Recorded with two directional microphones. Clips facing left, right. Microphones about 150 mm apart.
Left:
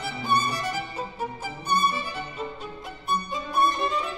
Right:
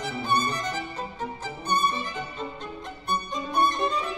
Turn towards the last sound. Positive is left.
turn(degrees=0)  # may be behind; listen again after turning